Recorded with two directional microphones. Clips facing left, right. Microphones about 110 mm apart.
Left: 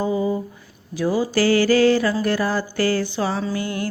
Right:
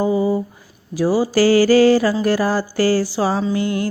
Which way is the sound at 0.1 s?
30° right (ahead or behind).